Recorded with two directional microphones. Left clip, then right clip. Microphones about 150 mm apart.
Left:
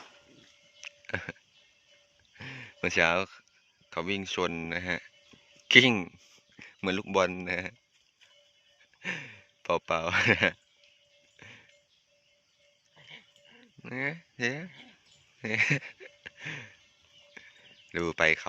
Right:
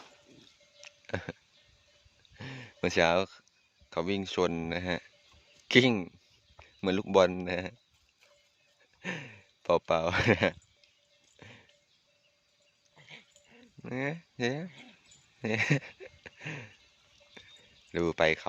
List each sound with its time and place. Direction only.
0.8 s a sound: 15° right (ahead or behind)
3.8 s speech: 20° right (ahead or behind)
5.9 s speech: 5° right (ahead or behind)
6.8 s speech: 20° right (ahead or behind)
9.0 s speech: 20° right (ahead or behind)
11.3 s music: 20° right (ahead or behind)
13.0 s a sound: 20° right (ahead or behind)
17.9 s speech: 20° right (ahead or behind)